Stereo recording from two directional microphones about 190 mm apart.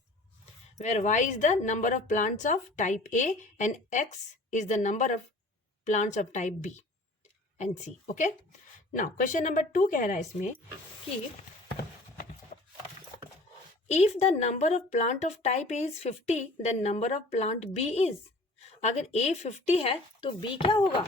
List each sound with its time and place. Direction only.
0.8 s a woman's voice: 40° left (ahead or behind)
12.5 s wood: 45° left (ahead or behind)
13.8 s a woman's voice: 35° left (ahead or behind)